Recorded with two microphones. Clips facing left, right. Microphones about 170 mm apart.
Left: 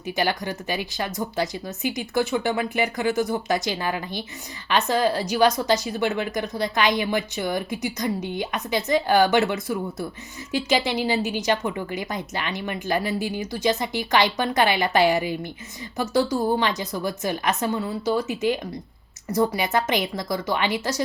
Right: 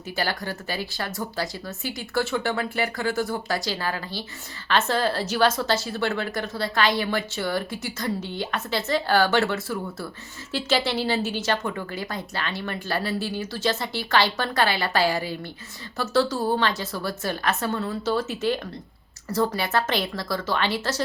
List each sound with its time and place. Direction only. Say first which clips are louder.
0.0 s speech: left 4 dB; 20° left (ahead or behind)